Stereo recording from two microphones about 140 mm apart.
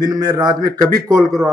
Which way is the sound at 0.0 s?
25° right (ahead or behind).